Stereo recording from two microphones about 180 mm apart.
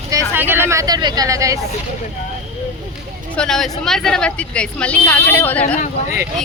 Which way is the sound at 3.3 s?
5° left (ahead or behind).